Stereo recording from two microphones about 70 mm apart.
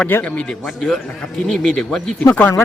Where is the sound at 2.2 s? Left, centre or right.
Left.